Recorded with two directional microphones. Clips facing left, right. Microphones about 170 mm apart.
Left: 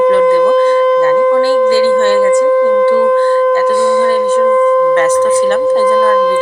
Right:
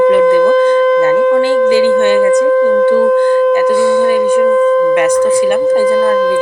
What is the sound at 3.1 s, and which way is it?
Speech, 15° right (ahead or behind).